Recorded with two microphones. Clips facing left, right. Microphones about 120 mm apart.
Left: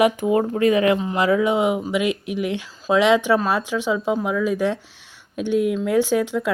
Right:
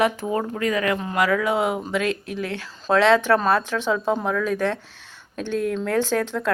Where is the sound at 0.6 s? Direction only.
20° left (ahead or behind).